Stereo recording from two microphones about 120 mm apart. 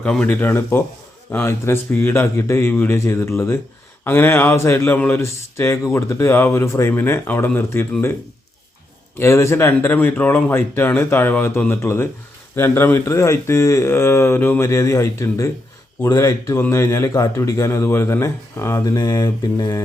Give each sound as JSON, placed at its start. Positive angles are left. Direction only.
{"t": 0.0, "sound": "speech", "side_deg": 10}
{"t": 9.1, "sound": "speech", "side_deg": 20}